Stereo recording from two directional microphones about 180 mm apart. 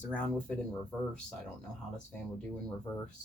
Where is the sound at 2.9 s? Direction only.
25° left (ahead or behind).